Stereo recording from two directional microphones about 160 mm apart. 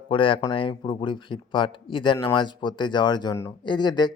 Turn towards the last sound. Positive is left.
turn(degrees=25)  # may be behind; listen again after turning